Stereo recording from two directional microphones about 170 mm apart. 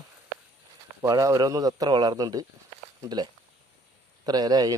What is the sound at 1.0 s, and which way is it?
A man's voice, 20° right (ahead or behind).